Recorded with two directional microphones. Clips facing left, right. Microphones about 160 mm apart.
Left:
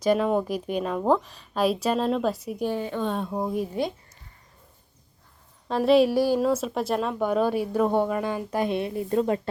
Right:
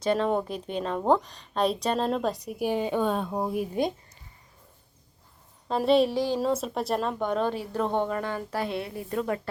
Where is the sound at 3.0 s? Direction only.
5° right (ahead or behind).